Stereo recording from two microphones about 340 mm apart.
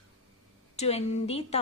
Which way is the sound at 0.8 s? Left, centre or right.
Centre.